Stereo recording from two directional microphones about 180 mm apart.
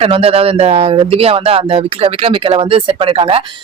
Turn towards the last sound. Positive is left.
turn(degrees=-30)  # may be behind; listen again after turning